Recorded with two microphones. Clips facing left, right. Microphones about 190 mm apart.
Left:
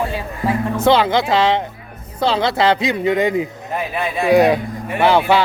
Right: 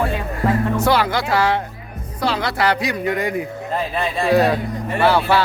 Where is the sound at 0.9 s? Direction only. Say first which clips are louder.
Left 7 dB; 20° left (ahead or behind).